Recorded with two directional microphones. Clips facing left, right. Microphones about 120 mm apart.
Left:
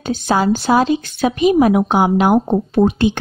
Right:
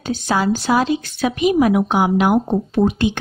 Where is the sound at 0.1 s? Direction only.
30° left (ahead or behind).